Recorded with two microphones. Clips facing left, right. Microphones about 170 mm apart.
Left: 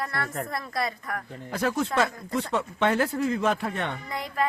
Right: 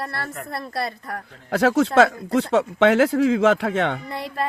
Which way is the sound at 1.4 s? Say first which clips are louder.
Right 8 dB; 90° right.